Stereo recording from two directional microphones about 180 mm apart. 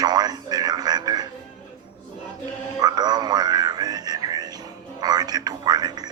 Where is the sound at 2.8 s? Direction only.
20° right (ahead or behind).